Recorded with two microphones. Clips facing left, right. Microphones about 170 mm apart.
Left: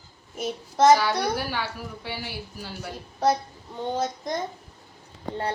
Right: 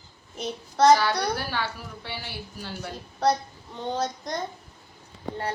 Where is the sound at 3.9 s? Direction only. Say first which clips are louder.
Left 1 dB; 5° left (ahead or behind).